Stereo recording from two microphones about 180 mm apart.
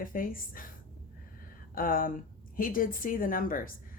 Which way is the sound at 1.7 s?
50° left (ahead or behind).